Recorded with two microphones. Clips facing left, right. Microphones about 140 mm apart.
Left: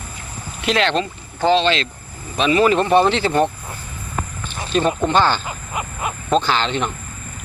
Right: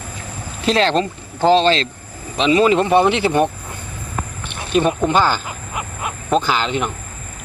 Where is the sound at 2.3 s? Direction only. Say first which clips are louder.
Right 1 dB; 20° right (ahead or behind).